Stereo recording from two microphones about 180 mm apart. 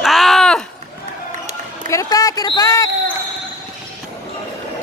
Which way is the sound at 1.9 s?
20° left (ahead or behind).